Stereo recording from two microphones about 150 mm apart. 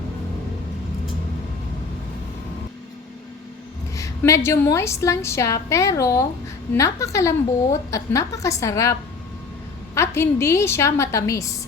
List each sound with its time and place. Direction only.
3.9 s a woman's voice: 20° left (ahead or behind)